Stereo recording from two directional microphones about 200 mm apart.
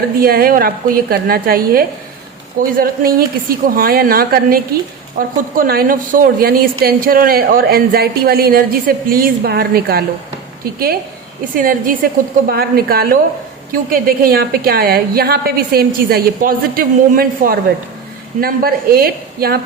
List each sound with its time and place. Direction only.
0.2 s a woman's voice: 50° right (ahead or behind)
11.5 s a woman's voice: 45° right (ahead or behind)